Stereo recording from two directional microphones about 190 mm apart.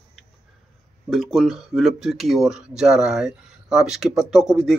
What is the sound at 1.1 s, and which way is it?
Speech, centre (ahead or behind).